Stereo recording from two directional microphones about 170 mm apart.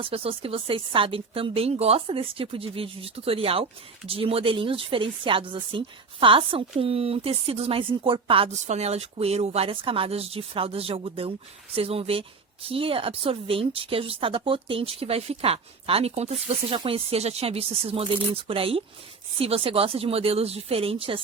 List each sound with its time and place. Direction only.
0.0 s speech: 35° right (ahead or behind)